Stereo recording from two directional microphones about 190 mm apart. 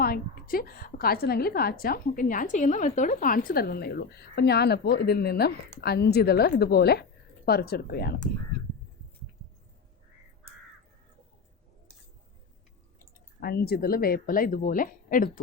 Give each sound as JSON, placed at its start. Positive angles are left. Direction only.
{"t": 0.0, "sound": "a woman's voice", "side_deg": 50}
{"t": 13.4, "sound": "a woman's voice", "side_deg": 55}